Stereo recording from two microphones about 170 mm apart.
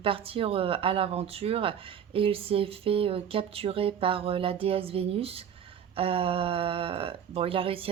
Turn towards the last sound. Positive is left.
turn(degrees=-35)  # may be behind; listen again after turning